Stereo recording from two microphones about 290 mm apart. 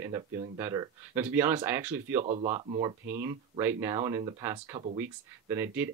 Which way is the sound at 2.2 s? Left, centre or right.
Right.